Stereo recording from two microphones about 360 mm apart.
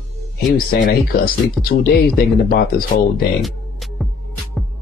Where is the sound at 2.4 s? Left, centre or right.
Left.